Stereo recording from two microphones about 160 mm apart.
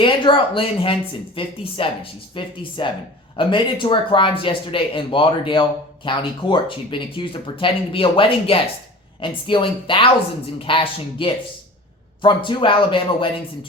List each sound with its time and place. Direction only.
0.0 s speech: 30° left (ahead or behind)